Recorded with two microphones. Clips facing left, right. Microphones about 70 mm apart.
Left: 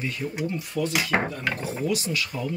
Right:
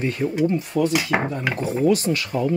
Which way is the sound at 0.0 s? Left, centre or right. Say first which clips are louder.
Right 8 dB; right.